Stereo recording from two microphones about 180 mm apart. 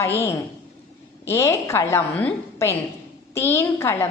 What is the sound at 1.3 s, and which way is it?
A woman's voice, 15° left (ahead or behind).